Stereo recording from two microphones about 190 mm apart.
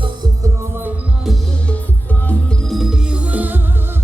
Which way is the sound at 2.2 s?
5° left (ahead or behind).